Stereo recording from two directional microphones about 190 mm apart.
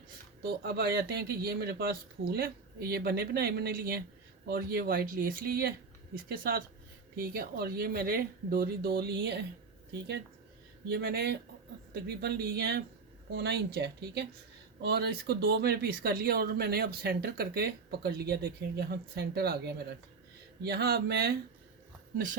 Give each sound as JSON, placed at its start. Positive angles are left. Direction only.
{"t": 0.4, "sound": "speech", "side_deg": -55}
{"t": 10.8, "sound": "speech", "side_deg": -55}